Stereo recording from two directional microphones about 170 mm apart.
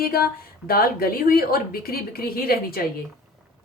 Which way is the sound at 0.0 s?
65° left (ahead or behind).